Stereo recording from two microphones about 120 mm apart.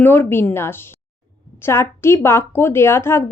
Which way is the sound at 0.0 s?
20° left (ahead or behind).